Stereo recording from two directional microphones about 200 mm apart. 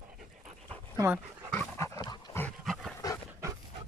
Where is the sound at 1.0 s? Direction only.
10° right (ahead or behind).